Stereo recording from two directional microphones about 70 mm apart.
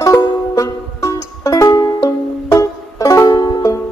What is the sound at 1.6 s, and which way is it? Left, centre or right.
Music, left.